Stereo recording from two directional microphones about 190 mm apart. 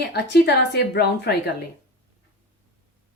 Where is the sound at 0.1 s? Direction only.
60° left (ahead or behind).